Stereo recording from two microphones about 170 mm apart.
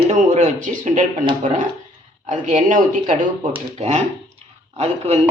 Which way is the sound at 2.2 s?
45° right (ahead or behind).